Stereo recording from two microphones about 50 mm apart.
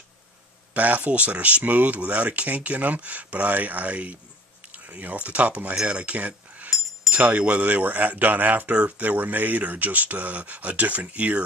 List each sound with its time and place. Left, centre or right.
0.7 s speech: right